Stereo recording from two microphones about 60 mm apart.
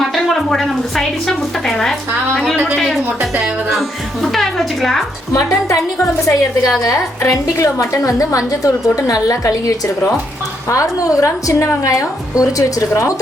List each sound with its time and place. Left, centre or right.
0.0 s a sound: centre
2.7 s music: centre
5.3 s a woman's voice: left